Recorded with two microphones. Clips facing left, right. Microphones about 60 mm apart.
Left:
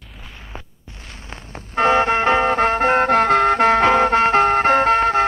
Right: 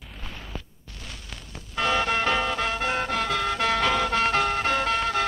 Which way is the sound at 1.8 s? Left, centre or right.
Left.